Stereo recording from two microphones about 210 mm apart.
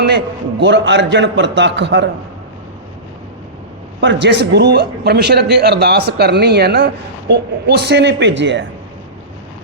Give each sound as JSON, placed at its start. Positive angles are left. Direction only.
{"t": 0.6, "sound": "a man's voice", "side_deg": -55}
{"t": 4.0, "sound": "a man's voice", "side_deg": -60}